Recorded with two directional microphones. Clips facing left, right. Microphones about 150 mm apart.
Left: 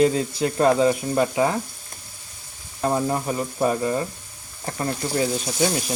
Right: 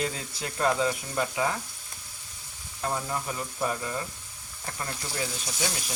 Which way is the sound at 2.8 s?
35° left (ahead or behind).